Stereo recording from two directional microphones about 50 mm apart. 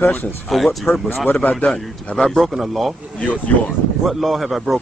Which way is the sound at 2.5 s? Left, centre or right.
Centre.